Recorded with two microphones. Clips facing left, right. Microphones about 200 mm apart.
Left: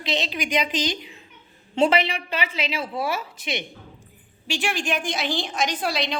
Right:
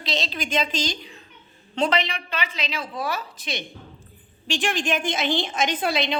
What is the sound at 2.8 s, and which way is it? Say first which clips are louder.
Speech: left 2 dB; 25° left (ahead or behind).